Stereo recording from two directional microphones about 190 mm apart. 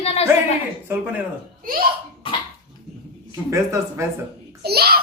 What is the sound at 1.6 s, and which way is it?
Speech, 50° right (ahead or behind).